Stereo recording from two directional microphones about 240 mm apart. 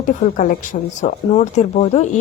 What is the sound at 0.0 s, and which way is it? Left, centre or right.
Speech, left.